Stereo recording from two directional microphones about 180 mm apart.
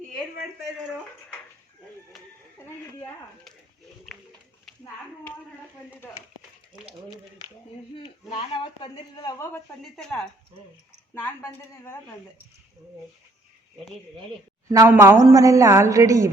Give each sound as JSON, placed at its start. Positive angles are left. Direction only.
{"t": 4.1, "sound": "pigeon", "side_deg": 0}
{"t": 8.3, "sound": "speech", "side_deg": 35}
{"t": 9.2, "sound": "a woman's voice", "side_deg": 15}
{"t": 14.7, "sound": "a woman's voice", "side_deg": -20}